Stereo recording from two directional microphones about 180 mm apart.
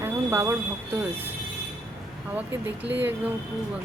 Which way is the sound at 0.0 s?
15° right (ahead or behind).